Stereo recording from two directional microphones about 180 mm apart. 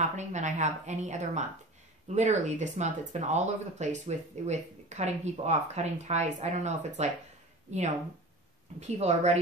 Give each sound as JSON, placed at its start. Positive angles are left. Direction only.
{"t": 0.0, "sound": "speech", "side_deg": -40}
{"t": 8.7, "sound": "speech", "side_deg": -40}